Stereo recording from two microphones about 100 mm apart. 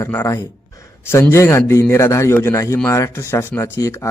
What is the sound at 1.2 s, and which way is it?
A man's voice, 25° left (ahead or behind).